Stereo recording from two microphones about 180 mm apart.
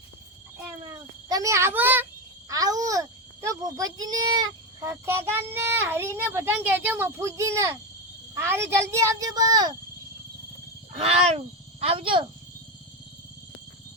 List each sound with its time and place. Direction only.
1.3 s a child's voice: 15° right (ahead or behind)
10.9 s speech: 35° right (ahead or behind)